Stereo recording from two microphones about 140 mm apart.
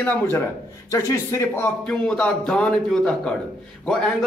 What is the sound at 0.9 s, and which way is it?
Speech, 20° left (ahead or behind).